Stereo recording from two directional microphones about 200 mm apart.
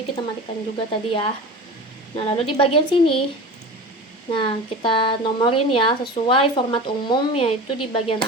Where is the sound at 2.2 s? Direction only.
25° left (ahead or behind).